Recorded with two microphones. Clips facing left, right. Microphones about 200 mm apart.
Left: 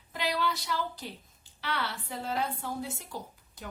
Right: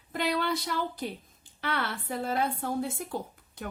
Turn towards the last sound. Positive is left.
turn(degrees=-55)  # may be behind; listen again after turning